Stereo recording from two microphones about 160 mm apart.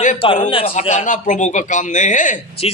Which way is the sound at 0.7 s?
45° left (ahead or behind).